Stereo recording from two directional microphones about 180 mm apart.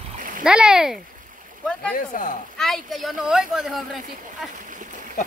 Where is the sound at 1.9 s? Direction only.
45° left (ahead or behind).